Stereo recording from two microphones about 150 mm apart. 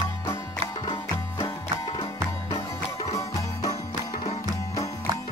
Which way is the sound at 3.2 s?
20° left (ahead or behind).